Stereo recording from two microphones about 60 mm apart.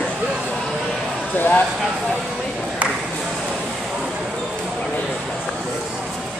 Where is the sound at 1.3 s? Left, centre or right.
Left.